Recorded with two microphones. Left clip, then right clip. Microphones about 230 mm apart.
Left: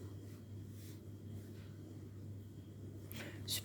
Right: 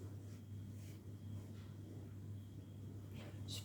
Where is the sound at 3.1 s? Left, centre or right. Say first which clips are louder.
Left 9 dB; left.